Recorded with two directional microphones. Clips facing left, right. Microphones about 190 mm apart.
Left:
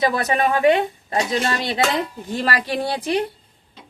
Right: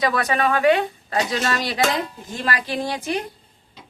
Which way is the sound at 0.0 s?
25° left (ahead or behind).